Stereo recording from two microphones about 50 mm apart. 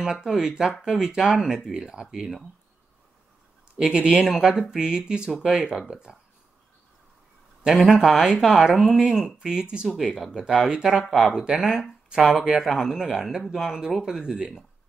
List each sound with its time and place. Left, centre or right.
0.0 s speech: centre
3.7 s speech: centre
7.7 s speech: centre